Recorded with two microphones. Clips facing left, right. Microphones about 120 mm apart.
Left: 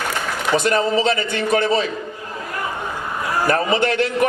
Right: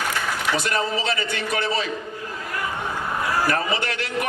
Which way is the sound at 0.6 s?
30° left (ahead or behind).